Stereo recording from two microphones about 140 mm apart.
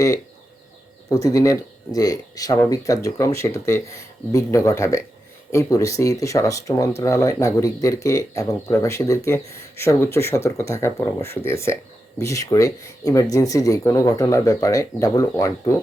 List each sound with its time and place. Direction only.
1.1 s speech: 25° left (ahead or behind)